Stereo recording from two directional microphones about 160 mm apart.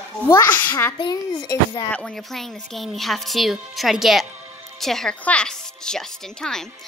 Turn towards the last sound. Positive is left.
turn(degrees=5)  # may be behind; listen again after turning